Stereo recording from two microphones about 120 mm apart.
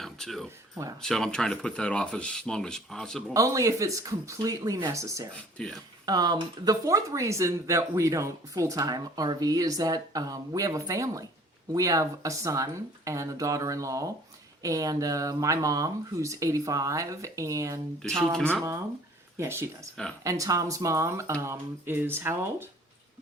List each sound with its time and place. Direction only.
0.0 s a sound: centre (ahead or behind)
1.0 s speech: 5° left (ahead or behind)
3.3 s speech: 25° right (ahead or behind)
5.6 s speech: 5° left (ahead or behind)
6.1 s speech: 35° right (ahead or behind)
19.4 s speech: 20° right (ahead or behind)